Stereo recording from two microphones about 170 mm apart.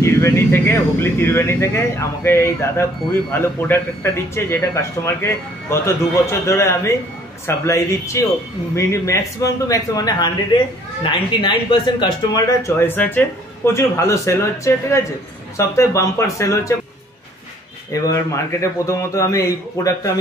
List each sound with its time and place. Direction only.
0.0 s speech: 15° left (ahead or behind)
17.9 s speech: 20° left (ahead or behind)